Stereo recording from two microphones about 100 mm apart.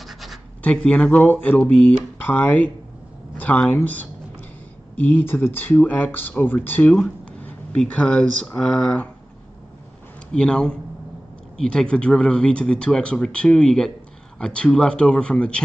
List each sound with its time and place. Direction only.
0.0 s scratch: centre (ahead or behind)
0.6 s speech: 15° left (ahead or behind)
10.3 s speech: 10° left (ahead or behind)